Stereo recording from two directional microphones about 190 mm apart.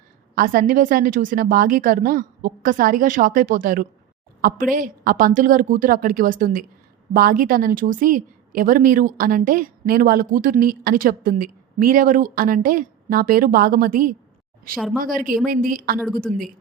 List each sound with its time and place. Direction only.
0.3 s a woman's voice: 45° right (ahead or behind)